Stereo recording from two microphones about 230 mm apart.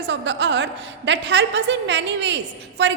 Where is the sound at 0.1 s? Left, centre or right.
Right.